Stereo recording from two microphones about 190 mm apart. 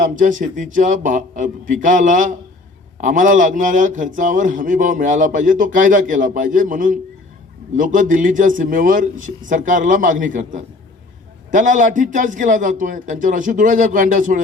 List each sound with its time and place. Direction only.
0.0 s a man's voice: 45° right (ahead or behind)